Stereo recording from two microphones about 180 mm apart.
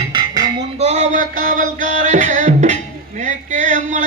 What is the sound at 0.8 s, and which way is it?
Music, 40° right (ahead or behind).